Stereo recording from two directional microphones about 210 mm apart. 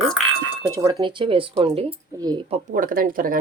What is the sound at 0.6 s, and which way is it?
Speech, 15° right (ahead or behind).